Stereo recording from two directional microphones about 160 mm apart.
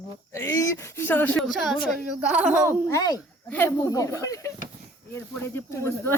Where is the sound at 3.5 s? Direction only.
15° left (ahead or behind).